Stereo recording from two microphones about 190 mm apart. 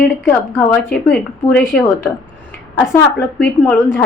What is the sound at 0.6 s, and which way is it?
A woman's voice, 5° left (ahead or behind).